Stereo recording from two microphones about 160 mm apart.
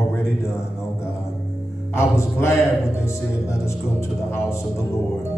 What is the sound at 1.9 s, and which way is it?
Speech, 15° left (ahead or behind).